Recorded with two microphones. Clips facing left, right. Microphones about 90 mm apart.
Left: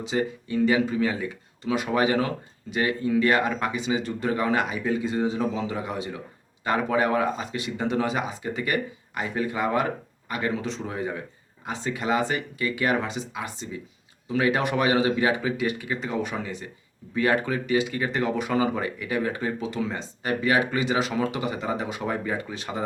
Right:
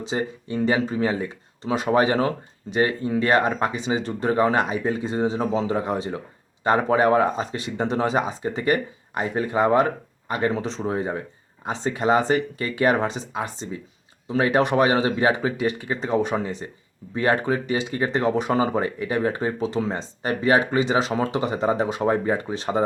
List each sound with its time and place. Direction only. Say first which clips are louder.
0.1 s speech: even; 30° right (ahead or behind)